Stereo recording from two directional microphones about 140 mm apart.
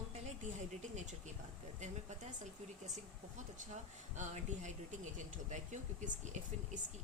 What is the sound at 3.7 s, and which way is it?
Speech, 55° right (ahead or behind).